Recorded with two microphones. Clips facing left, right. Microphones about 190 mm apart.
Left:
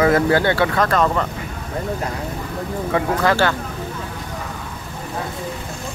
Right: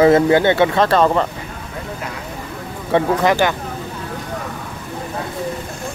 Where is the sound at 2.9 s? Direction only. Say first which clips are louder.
Right 4 dB; 20° right (ahead or behind).